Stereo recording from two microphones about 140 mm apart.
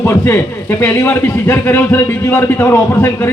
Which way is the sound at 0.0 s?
20° left (ahead or behind).